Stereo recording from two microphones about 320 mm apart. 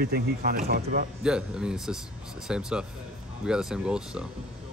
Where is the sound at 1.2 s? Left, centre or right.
Centre.